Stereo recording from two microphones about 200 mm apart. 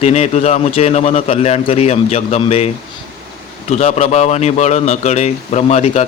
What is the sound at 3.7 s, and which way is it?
A man's voice, 35° left (ahead or behind).